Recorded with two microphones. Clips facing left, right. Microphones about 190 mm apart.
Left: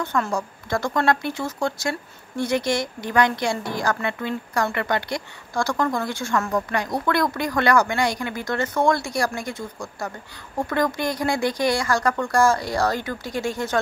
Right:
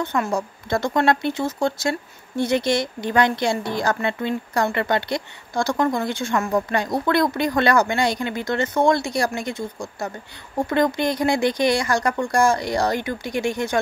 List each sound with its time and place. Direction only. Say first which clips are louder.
0.0 s speech: right 2 dB; 20° right (ahead or behind)